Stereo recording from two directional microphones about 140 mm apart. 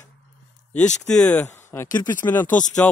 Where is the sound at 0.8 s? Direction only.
60° left (ahead or behind).